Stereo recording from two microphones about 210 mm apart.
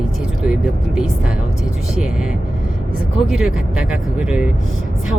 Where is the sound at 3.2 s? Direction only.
5° right (ahead or behind).